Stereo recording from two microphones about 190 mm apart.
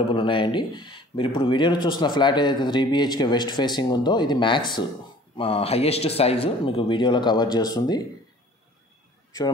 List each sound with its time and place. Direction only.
0.1 s speech: 25° left (ahead or behind)